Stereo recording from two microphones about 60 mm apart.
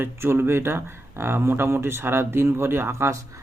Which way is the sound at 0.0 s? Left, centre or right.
Right.